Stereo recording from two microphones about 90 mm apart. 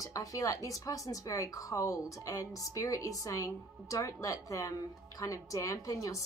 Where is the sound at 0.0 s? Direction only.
40° left (ahead or behind).